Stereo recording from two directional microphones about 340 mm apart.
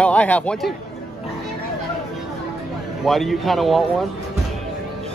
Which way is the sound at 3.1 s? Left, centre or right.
Centre.